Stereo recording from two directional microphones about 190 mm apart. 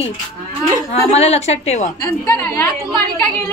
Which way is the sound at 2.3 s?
10° left (ahead or behind).